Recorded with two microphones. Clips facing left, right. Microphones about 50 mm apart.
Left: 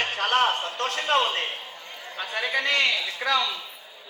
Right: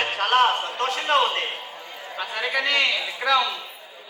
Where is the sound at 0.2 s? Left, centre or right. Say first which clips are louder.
Right 4 dB; right.